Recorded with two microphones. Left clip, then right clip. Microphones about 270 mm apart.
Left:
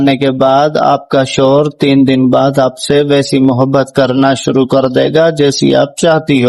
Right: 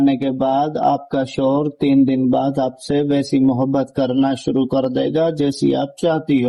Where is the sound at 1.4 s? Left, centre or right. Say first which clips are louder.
Left 7 dB; left.